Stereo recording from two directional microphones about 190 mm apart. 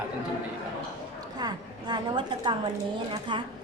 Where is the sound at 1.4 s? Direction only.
20° right (ahead or behind).